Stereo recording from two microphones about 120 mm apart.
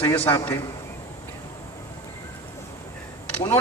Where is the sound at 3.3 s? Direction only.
20° left (ahead or behind).